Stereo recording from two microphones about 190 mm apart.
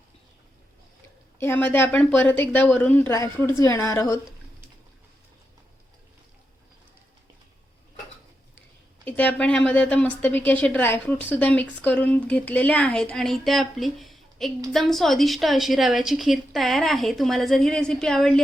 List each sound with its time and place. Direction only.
1.4 s a woman's voice: 10° left (ahead or behind)
9.0 s a woman's voice: 10° left (ahead or behind)